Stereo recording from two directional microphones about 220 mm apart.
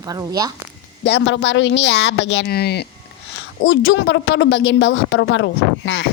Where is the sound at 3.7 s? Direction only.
60° left (ahead or behind).